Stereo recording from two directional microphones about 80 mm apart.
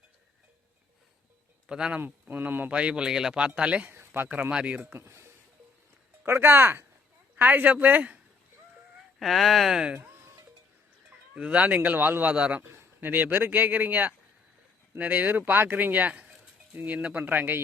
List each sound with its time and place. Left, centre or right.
1.6 s speech: centre
2.0 s a man's voice: right
9.1 s speech: centre
11.3 s a man's voice: centre
12.7 s a man's voice: right